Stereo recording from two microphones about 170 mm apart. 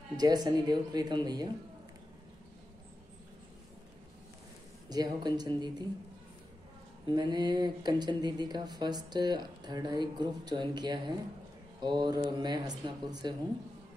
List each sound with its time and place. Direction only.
0.2 s speech: 25° right (ahead or behind)
4.8 s speech: 25° right (ahead or behind)
7.1 s speech: 25° right (ahead or behind)